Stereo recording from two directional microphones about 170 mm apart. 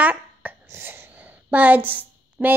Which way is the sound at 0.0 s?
10° right (ahead or behind).